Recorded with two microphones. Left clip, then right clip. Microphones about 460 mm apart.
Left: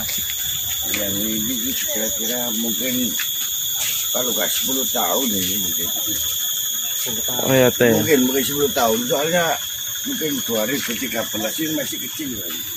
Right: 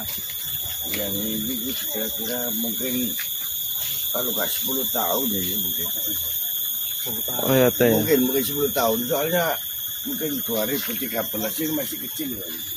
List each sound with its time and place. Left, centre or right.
7.4 s speech: right